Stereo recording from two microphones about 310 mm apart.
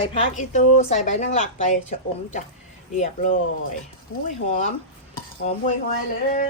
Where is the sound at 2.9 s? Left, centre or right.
Left.